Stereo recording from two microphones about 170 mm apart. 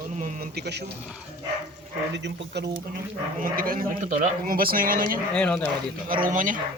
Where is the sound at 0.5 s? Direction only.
75° right (ahead or behind).